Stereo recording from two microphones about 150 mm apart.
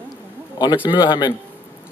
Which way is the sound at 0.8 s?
30° left (ahead or behind).